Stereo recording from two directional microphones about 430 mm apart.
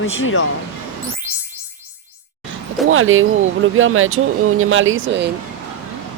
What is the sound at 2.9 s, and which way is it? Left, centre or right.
Speech, right.